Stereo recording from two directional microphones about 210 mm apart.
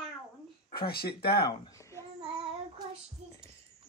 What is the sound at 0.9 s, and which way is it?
Speech, 50° left (ahead or behind).